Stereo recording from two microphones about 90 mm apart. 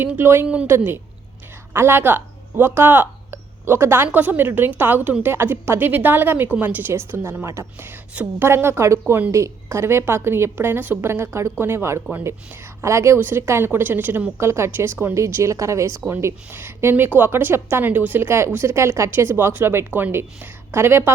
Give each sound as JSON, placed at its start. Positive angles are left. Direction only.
{"t": 0.0, "sound": "a woman's voice", "side_deg": -25}
{"t": 0.4, "sound": "a woman's voice", "side_deg": -15}
{"t": 1.7, "sound": "a woman's voice", "side_deg": -25}
{"t": 16.1, "sound": "a woman's voice", "side_deg": -25}